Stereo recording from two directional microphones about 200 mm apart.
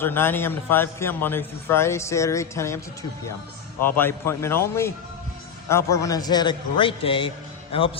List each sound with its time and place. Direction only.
0.0 s a man's voice: 10° left (ahead or behind); by 7.9 s 25° left (ahead or behind)